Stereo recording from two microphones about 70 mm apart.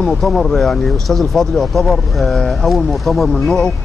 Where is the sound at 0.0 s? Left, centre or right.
Centre.